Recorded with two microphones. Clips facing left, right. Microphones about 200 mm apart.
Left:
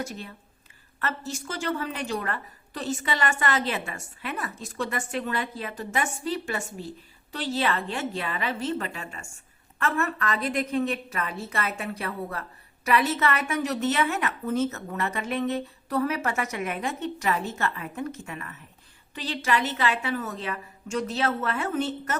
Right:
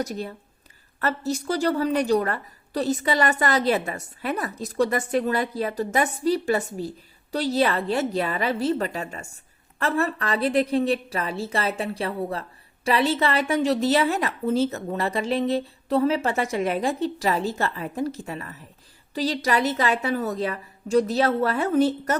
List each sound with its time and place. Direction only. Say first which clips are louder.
0.9 s a woman's voice: right 7 dB; 40° right (ahead or behind)